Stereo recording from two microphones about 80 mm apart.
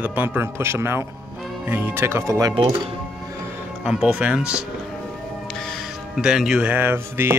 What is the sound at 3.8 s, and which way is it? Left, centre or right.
Speech, centre.